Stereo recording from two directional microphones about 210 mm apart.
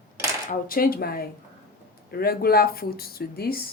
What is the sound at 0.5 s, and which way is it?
Speech, 45° left (ahead or behind).